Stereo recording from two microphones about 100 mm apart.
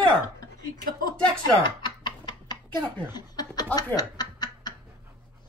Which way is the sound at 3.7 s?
40° left (ahead or behind).